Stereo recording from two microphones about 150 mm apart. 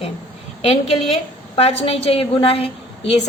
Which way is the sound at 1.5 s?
45° left (ahead or behind).